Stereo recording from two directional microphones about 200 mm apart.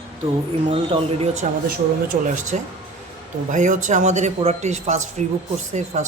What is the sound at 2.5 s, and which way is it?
Speech, 35° right (ahead or behind).